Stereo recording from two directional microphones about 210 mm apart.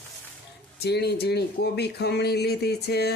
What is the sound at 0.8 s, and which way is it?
Speech, 50° left (ahead or behind).